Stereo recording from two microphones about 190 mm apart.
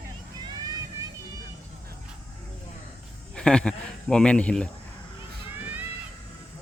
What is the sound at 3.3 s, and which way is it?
Speech, 5° left (ahead or behind).